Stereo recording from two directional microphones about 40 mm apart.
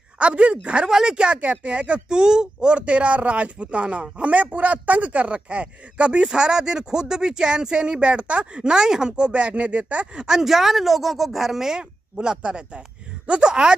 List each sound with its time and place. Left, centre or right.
0.2 s speech: right
0.8 s speech: centre
10.2 s speech: centre